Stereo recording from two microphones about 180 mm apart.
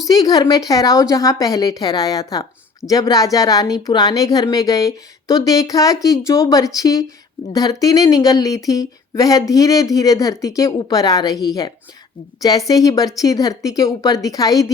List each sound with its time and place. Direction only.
0.1 s speech: 20° left (ahead or behind)